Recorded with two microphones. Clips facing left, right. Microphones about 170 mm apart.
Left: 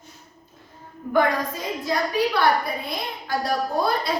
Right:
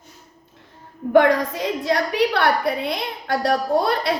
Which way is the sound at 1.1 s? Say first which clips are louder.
Right 6 dB; 75° right (ahead or behind).